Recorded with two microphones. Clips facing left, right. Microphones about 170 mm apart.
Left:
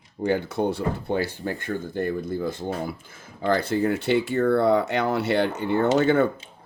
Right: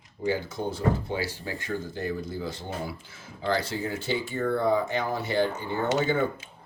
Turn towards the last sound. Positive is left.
turn(degrees=70)  # may be behind; listen again after turning